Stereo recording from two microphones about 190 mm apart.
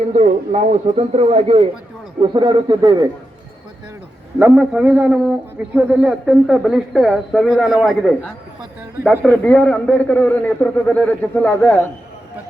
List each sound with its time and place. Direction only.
0.1 s a man's voice: 40° right (ahead or behind); by 3.1 s 20° right (ahead or behind)
4.4 s a man's voice: 10° right (ahead or behind)